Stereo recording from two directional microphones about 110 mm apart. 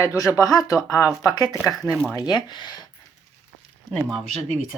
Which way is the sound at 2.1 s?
35° left (ahead or behind).